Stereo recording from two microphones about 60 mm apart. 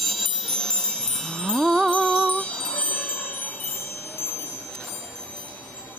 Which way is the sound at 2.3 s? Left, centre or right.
Centre.